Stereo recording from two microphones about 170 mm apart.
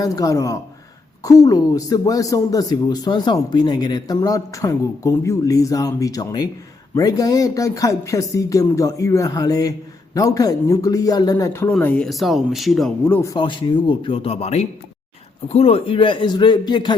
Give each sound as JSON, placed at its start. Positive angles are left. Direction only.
{"t": 0.0, "sound": "speech", "side_deg": 20}
{"t": 13.1, "sound": "speech", "side_deg": 10}
{"t": 13.3, "sound": "speech", "side_deg": 30}